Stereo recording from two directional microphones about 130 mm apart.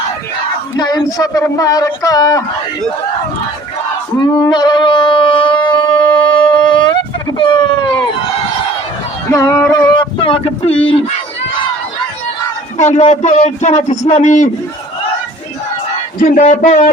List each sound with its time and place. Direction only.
0.8 s speech: 30° left (ahead or behind)
4.2 s shofar: 30° left (ahead or behind)
9.3 s music: 20° left (ahead or behind)
9.9 s speech: 40° left (ahead or behind)
12.7 s a man's voice: 60° left (ahead or behind)
16.2 s a sound: 75° left (ahead or behind)